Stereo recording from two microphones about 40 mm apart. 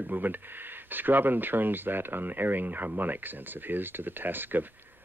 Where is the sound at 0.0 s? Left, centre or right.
Right.